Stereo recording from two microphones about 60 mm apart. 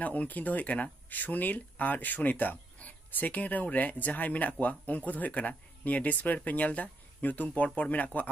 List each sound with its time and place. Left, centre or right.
0.0 s speech: left